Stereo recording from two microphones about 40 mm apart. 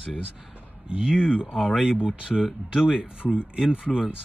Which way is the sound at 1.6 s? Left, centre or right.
Centre.